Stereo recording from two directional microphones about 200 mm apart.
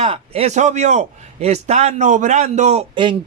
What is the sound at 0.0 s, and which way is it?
A man's voice, 30° right (ahead or behind).